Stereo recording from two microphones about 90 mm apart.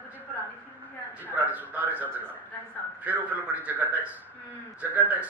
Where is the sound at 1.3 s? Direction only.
20° right (ahead or behind).